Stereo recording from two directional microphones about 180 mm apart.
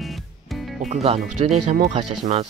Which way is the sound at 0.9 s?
35° right (ahead or behind).